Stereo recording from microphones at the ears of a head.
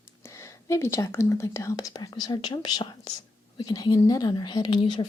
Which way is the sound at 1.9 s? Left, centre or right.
Left.